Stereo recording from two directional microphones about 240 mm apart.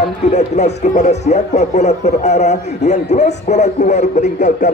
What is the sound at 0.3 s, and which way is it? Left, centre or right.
Speech, left.